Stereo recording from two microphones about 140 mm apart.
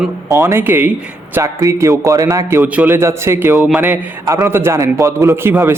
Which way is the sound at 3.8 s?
20° right (ahead or behind).